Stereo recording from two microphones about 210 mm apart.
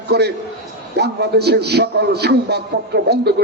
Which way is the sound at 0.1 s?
50° right (ahead or behind).